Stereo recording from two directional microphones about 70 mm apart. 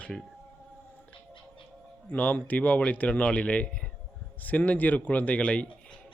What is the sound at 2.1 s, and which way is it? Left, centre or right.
A man's voice, left.